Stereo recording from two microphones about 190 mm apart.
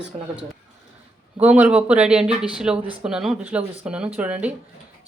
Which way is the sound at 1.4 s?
5° right (ahead or behind).